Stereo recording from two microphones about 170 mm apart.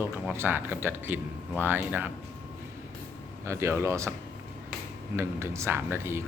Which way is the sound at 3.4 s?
15° right (ahead or behind).